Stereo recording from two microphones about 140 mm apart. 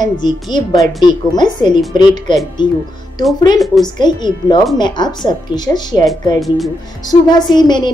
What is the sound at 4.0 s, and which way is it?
A woman's voice, 30° left (ahead or behind).